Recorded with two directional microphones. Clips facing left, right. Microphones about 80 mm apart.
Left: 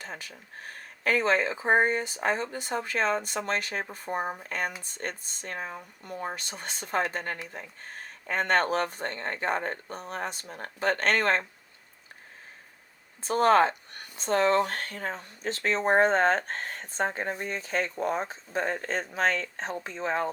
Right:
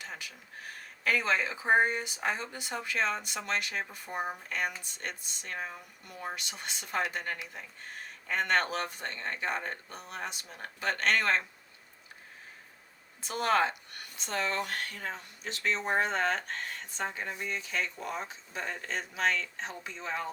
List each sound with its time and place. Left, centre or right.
0.0 s speech: left
13.2 s speech: left